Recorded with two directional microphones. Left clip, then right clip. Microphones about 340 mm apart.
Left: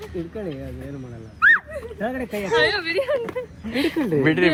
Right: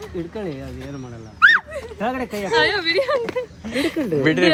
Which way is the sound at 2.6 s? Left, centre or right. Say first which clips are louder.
Right 3 dB; right.